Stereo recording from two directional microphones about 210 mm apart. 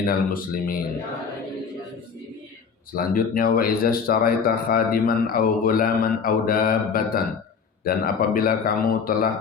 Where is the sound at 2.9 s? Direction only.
40° left (ahead or behind).